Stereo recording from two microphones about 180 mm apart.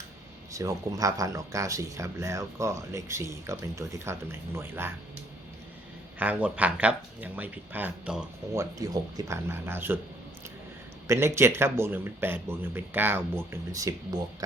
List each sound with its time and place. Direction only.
0.5 s speech: 15° right (ahead or behind)
6.1 s speech: 10° right (ahead or behind)
8.8 s speech: 20° right (ahead or behind)
11.1 s speech: 15° right (ahead or behind)